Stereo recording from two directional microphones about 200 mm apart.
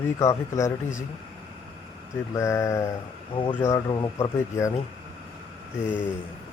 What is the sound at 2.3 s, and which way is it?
Speech, 15° left (ahead or behind).